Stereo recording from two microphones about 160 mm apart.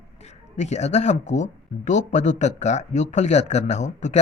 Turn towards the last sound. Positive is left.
turn(degrees=45)  # may be behind; listen again after turning